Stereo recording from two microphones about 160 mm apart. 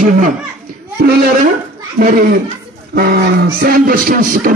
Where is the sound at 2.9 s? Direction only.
70° right (ahead or behind).